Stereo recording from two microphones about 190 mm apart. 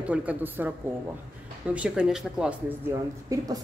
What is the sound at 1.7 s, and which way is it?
Speech, 5° right (ahead or behind).